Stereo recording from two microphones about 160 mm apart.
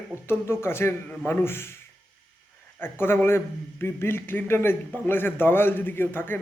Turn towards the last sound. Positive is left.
turn(degrees=15)  # may be behind; listen again after turning